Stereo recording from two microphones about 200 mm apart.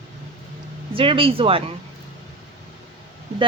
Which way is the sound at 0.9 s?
25° right (ahead or behind).